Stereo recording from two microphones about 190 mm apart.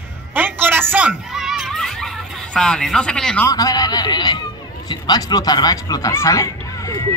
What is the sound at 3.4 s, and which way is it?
A man's voice, 20° left (ahead or behind).